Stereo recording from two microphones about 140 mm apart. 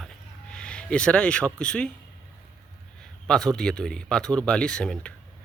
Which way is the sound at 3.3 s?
5° left (ahead or behind).